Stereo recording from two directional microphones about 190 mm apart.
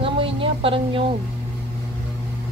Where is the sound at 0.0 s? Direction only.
30° right (ahead or behind).